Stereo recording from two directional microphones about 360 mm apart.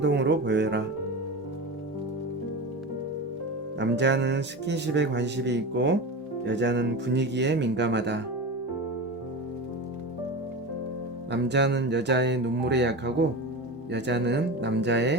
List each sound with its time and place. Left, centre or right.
0.0 s speech: right
3.8 s speech: right
11.3 s speech: right